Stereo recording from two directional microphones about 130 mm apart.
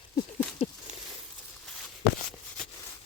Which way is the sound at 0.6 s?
55° left (ahead or behind).